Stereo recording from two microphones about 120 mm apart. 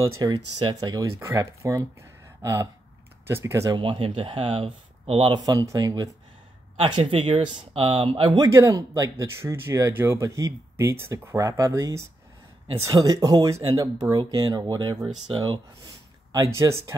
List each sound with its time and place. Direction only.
0.0 s speech: 35° right (ahead or behind)
3.7 s speech: 40° right (ahead or behind)
5.4 s speech: 35° right (ahead or behind)
7.0 s speech: 45° right (ahead or behind)
8.4 s speech: 25° right (ahead or behind)